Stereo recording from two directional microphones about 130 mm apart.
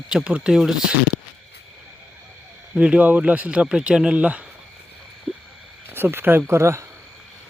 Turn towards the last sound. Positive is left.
turn(degrees=-20)  # may be behind; listen again after turning